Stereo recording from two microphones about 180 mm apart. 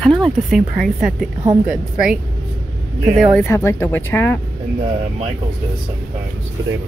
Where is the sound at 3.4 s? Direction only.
15° left (ahead or behind).